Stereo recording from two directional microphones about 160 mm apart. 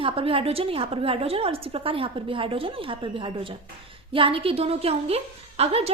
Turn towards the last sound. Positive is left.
turn(degrees=-40)  # may be behind; listen again after turning